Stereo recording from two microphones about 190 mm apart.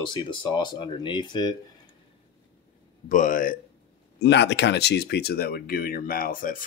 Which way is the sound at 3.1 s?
45° left (ahead or behind).